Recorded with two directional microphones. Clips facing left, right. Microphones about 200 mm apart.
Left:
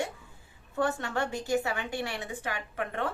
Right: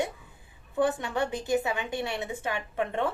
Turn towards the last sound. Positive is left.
turn(degrees=-25)  # may be behind; listen again after turning